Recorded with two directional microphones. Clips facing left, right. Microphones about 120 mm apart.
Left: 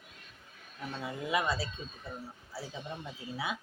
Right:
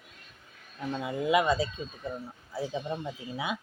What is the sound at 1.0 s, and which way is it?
Speech, 20° right (ahead or behind).